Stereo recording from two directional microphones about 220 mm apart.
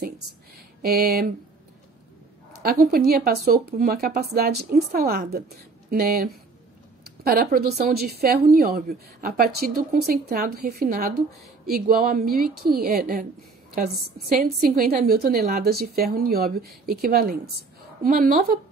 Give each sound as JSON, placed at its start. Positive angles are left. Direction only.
{"t": 0.8, "sound": "a woman's voice", "side_deg": -45}
{"t": 2.6, "sound": "a woman's voice", "side_deg": -40}
{"t": 14.4, "sound": "a woman's voice", "side_deg": -45}